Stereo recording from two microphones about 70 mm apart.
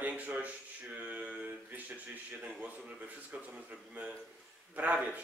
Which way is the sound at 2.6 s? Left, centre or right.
Right.